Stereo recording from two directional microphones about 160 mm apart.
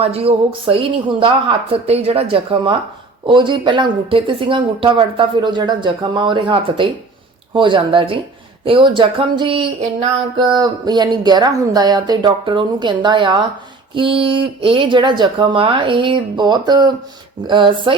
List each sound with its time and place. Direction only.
0.0 s speech: 40° right (ahead or behind)